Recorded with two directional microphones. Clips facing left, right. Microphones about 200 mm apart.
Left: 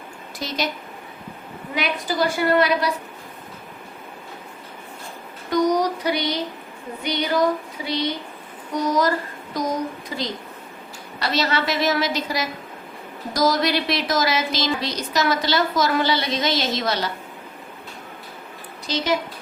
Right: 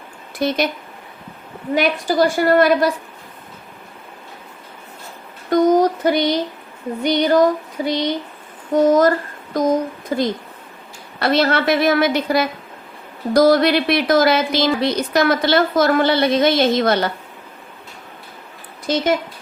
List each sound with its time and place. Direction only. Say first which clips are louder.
0.3 s speech: right 8 dB; 55° right (ahead or behind)
1.7 s a woman's voice: right 7 dB; 50° right (ahead or behind)
5.5 s a sound: right 6 dB; 50° right (ahead or behind)
7.0 s a woman's voice: right 7 dB; 50° right (ahead or behind)
18.9 s a woman's voice: right 7 dB; 50° right (ahead or behind)